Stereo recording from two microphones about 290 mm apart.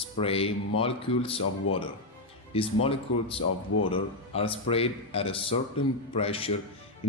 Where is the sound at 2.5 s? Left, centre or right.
Centre.